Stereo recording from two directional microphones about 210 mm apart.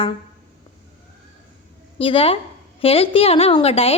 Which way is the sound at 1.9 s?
25° left (ahead or behind).